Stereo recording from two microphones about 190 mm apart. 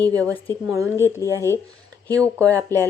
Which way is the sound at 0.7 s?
15° right (ahead or behind).